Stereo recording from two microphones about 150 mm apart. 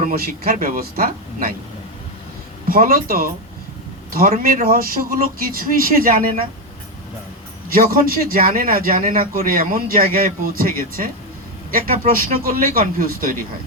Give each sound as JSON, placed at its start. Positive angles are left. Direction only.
{"t": 0.0, "sound": "speech", "side_deg": -75}
{"t": 2.6, "sound": "a man's voice", "side_deg": -80}
{"t": 7.7, "sound": "a man's voice", "side_deg": -75}